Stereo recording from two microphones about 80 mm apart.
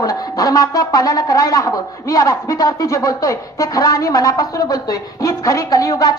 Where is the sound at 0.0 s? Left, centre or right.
Left.